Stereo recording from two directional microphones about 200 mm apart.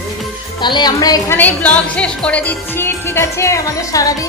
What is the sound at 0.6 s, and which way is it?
A woman's voice, 20° left (ahead or behind).